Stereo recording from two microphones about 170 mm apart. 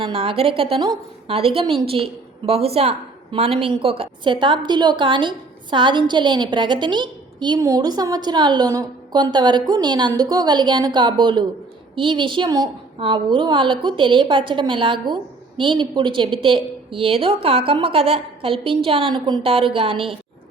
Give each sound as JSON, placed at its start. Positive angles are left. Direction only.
{"t": 0.0, "sound": "a woman's voice", "side_deg": -35}